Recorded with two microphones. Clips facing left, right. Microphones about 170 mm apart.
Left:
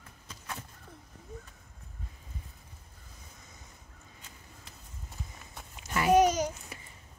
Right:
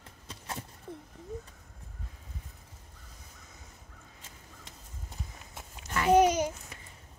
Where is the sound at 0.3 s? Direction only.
30° right (ahead or behind).